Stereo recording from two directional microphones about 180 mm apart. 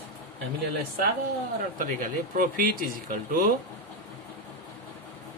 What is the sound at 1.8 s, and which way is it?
Speech, 50° right (ahead or behind).